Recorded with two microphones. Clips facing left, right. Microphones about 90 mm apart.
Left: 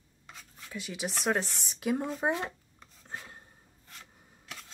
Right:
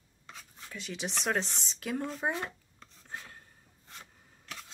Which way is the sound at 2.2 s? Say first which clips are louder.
Left 3 dB; 20° left (ahead or behind).